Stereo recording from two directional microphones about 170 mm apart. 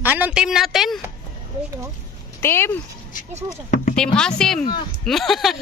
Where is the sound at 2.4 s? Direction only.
15° left (ahead or behind).